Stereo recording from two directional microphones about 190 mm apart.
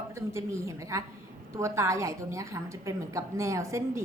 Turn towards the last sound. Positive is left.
turn(degrees=-15)  # may be behind; listen again after turning